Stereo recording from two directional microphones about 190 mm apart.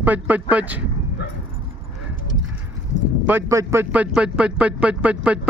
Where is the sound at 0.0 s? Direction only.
10° right (ahead or behind).